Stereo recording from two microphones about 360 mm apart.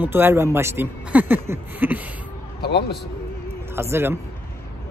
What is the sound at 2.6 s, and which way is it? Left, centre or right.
Speech, left.